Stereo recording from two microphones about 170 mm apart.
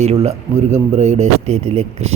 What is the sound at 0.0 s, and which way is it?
A man's voice, 40° right (ahead or behind).